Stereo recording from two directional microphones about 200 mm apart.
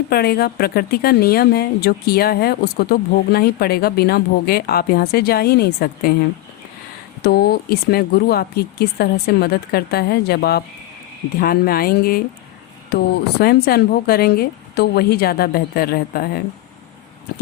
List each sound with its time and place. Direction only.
0.1 s a woman's voice: 50° left (ahead or behind)
7.2 s a woman's voice: 50° left (ahead or behind)